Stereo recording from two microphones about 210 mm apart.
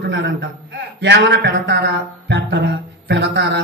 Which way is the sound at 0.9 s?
55° right (ahead or behind).